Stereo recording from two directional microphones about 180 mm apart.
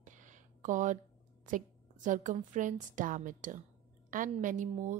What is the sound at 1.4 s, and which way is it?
A woman's voice, 45° right (ahead or behind).